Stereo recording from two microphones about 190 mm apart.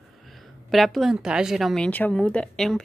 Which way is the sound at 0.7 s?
Centre (ahead or behind).